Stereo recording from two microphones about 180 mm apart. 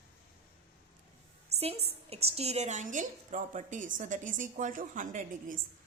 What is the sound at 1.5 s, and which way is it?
A woman's voice, 35° right (ahead or behind).